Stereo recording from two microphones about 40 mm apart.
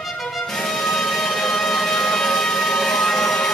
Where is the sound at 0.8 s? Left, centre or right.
Centre.